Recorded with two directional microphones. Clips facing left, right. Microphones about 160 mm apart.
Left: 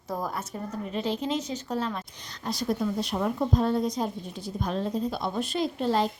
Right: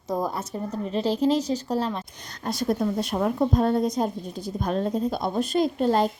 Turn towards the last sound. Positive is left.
turn(degrees=-45)  # may be behind; listen again after turning